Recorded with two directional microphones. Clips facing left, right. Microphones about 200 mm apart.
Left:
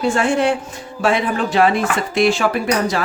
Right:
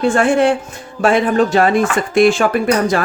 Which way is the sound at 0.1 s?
55° right (ahead or behind).